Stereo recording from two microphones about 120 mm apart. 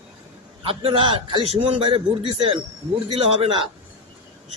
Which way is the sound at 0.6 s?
50° right (ahead or behind).